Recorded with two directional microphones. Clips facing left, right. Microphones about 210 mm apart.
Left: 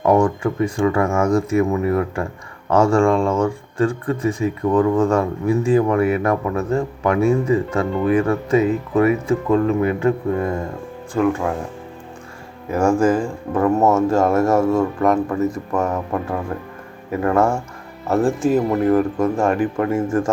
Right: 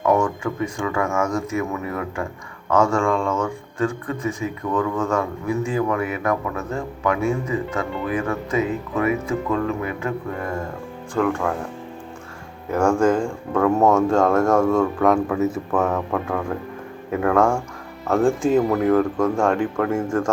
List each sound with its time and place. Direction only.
0.0 s speech: 35° left (ahead or behind)
11.1 s speech: 10° left (ahead or behind)
12.7 s speech: 5° left (ahead or behind)